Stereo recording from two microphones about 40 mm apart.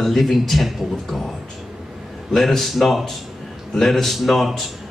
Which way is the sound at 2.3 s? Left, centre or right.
Centre.